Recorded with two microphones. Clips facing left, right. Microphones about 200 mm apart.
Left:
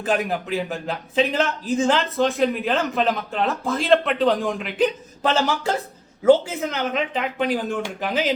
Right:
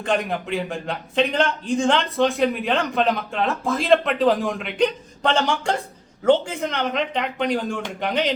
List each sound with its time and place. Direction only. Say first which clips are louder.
0.0 s a man's voice: even; 5° left (ahead or behind)